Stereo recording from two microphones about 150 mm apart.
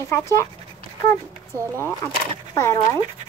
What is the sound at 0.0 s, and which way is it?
Speech, 20° left (ahead or behind).